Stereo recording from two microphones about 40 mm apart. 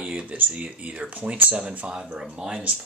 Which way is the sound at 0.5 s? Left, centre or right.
Right.